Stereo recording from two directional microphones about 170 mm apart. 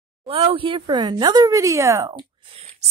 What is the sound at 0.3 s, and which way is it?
Speech, 35° right (ahead or behind).